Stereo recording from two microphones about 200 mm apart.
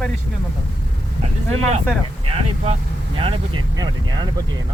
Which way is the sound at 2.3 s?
30° right (ahead or behind).